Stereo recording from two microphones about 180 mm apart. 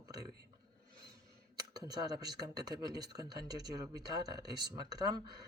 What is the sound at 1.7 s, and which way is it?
Speech, 20° right (ahead or behind).